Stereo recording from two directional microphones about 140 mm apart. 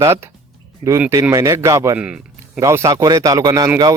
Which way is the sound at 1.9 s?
5° right (ahead or behind).